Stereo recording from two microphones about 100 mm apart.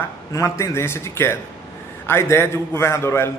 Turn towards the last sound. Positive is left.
turn(degrees=30)  # may be behind; listen again after turning